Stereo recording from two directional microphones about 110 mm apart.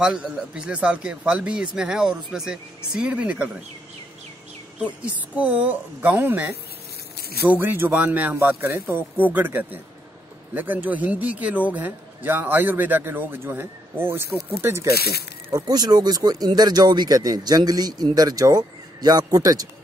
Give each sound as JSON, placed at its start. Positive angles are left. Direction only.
{"t": 0.0, "sound": "speech", "side_deg": -10}
{"t": 4.7, "sound": "speech", "side_deg": -10}
{"t": 15.5, "sound": "speech", "side_deg": -35}